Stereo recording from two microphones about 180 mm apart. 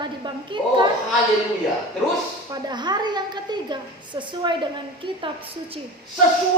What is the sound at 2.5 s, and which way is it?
A woman's voice, 25° right (ahead or behind).